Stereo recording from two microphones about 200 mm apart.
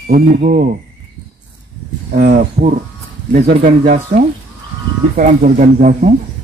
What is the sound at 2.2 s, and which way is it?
Speech, 45° right (ahead or behind).